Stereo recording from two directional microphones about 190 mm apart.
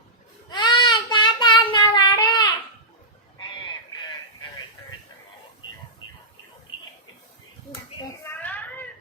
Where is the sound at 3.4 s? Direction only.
25° left (ahead or behind).